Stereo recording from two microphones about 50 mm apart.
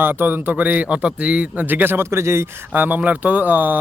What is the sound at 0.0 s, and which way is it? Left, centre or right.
Speech, right.